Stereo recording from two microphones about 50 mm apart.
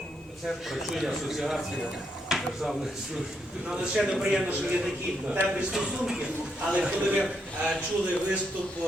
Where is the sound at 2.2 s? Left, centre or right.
Centre.